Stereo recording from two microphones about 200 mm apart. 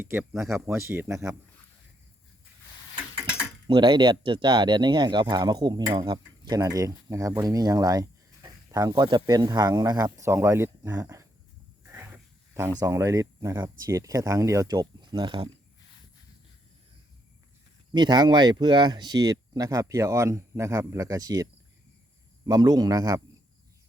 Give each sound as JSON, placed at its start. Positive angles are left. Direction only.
{"t": 0.0, "sound": "speech", "side_deg": -10}
{"t": 3.7, "sound": "speech", "side_deg": -25}
{"t": 11.9, "sound": "a sound", "side_deg": -10}
{"t": 12.8, "sound": "speech", "side_deg": -15}
{"t": 17.9, "sound": "speech", "side_deg": -20}
{"t": 22.4, "sound": "speech", "side_deg": -20}